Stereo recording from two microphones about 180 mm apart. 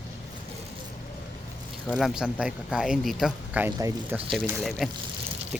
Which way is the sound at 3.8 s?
20° right (ahead or behind).